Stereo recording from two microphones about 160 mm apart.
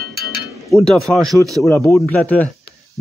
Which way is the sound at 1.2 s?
20° right (ahead or behind).